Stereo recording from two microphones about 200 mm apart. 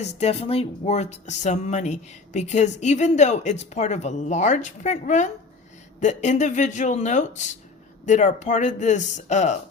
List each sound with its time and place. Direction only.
0.2 s speech: 30° left (ahead or behind)